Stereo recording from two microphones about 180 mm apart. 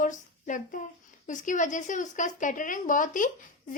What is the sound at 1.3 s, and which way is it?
A woman's voice, 45° left (ahead or behind).